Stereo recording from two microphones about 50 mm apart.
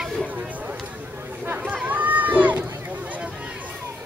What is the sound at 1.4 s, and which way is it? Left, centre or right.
Run, right.